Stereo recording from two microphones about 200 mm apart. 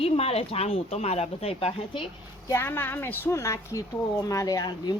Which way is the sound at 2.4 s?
10° left (ahead or behind).